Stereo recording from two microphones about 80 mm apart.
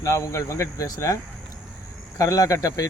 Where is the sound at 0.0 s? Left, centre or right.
Left.